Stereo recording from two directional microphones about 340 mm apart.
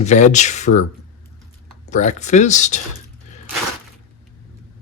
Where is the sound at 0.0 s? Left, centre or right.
Left.